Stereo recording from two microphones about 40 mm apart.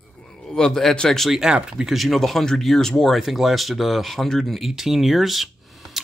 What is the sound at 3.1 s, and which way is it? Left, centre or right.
Speech, centre.